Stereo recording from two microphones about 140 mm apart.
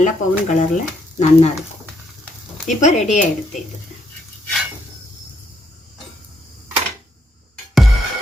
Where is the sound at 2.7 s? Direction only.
55° left (ahead or behind).